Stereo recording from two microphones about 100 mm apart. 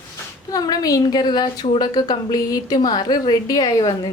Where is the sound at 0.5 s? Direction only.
40° left (ahead or behind).